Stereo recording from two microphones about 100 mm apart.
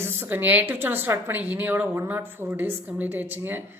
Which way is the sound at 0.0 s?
20° right (ahead or behind).